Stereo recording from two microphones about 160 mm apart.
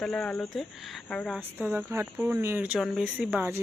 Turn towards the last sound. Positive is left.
turn(degrees=-10)  # may be behind; listen again after turning